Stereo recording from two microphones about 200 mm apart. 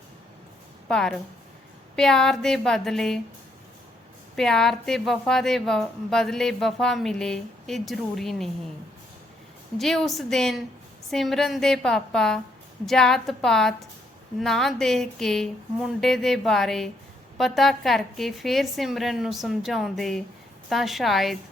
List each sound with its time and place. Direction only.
0.9 s a woman's voice: 5° left (ahead or behind)
4.4 s a woman's voice: centre (ahead or behind)
9.7 s a woman's voice: centre (ahead or behind)